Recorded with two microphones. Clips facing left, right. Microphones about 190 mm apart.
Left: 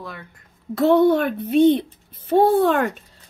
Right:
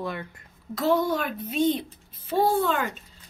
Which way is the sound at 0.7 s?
60° left (ahead or behind).